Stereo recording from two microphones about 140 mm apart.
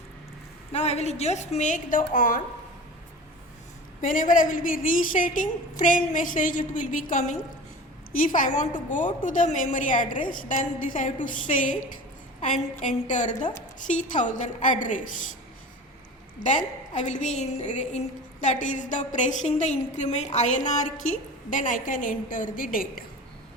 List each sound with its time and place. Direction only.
0.7 s a woman's voice: 50° left (ahead or behind); by 2.4 s 70° left (ahead or behind)
4.0 s a woman's voice: 75° left (ahead or behind)
12.8 s a woman's voice: 60° left (ahead or behind)
16.9 s a woman's voice: 60° left (ahead or behind); by 23.0 s 90° left